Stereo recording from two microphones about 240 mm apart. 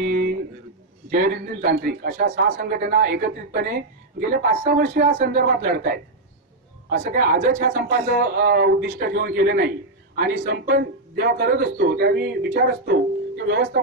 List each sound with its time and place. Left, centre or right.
0.0 s a sound: right
1.1 s a man's voice: right
7.2 s a man's voice: right